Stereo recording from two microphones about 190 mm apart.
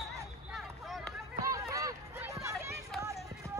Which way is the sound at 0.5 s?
Centre (ahead or behind).